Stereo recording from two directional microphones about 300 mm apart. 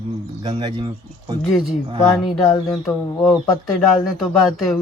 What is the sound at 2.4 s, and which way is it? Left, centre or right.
Speech, centre.